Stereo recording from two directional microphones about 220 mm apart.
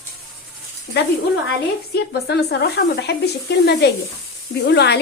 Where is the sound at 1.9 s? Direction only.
45° left (ahead or behind).